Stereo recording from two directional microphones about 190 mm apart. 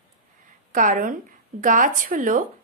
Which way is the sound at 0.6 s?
45° right (ahead or behind).